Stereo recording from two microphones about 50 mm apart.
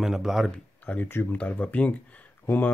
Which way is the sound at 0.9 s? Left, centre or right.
Left.